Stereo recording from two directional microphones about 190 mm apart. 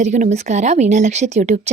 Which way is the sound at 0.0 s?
40° right (ahead or behind).